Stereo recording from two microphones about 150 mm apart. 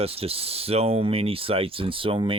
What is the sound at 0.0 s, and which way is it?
Speech, 40° right (ahead or behind).